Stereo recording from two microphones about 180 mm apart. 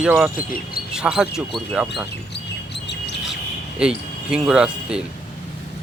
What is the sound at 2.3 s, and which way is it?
Chirp, 70° left (ahead or behind).